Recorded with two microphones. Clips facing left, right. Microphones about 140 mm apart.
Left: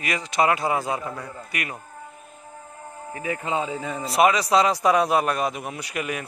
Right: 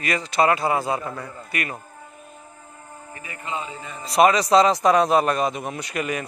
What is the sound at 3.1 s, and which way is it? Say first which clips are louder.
Speech: left 6 dB; 90° left.